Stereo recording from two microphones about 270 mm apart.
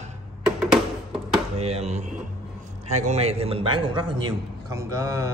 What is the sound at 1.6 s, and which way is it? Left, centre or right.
A man's voice, right.